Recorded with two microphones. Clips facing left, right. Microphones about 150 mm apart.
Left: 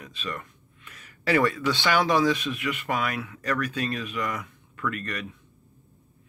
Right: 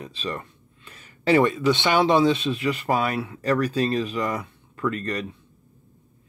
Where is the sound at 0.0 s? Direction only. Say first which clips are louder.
Right 4 dB; 30° right (ahead or behind).